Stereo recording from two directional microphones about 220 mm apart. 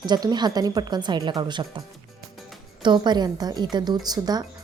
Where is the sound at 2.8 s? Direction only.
20° right (ahead or behind).